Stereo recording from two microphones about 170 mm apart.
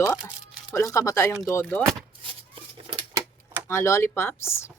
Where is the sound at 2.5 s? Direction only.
30° right (ahead or behind).